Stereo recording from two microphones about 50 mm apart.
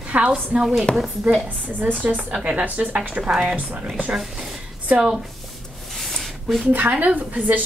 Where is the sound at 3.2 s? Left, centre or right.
Centre.